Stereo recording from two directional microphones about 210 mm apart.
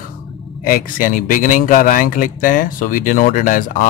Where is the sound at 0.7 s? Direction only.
40° left (ahead or behind).